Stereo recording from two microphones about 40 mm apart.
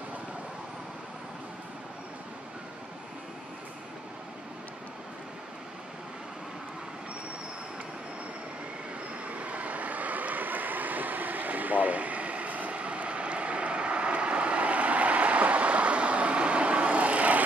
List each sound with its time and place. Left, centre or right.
9.3 s vehicle: right